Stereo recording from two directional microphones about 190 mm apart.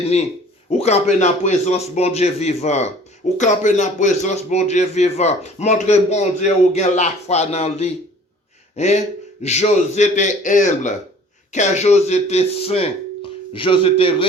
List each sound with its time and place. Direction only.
0.7 s a man's voice: 35° left (ahead or behind)